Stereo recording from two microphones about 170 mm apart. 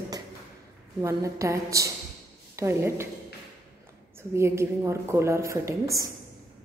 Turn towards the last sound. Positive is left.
turn(degrees=-20)  # may be behind; listen again after turning